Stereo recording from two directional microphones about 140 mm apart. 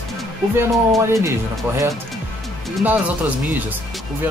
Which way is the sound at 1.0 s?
20° right (ahead or behind).